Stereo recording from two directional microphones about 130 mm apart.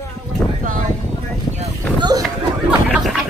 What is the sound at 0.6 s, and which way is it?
Speech, 90° right.